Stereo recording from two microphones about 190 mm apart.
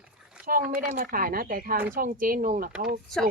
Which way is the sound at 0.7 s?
50° right (ahead or behind).